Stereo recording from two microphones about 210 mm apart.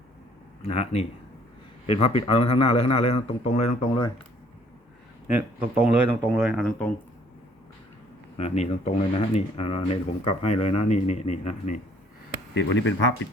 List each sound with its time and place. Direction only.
0.6 s a man's voice: 30° left (ahead or behind)
5.7 s speech: 10° right (ahead or behind)
8.4 s speech: 30° left (ahead or behind)
12.5 s speech: 60° left (ahead or behind)